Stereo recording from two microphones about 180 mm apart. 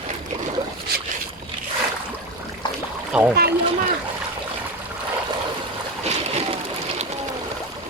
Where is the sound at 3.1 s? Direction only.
10° right (ahead or behind).